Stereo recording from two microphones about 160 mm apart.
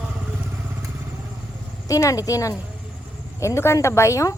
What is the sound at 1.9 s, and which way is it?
Speech, 20° left (ahead or behind).